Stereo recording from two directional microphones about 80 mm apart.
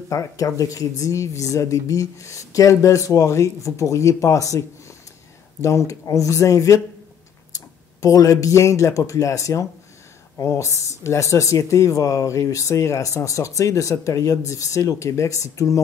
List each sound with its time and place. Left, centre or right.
0.1 s speech: left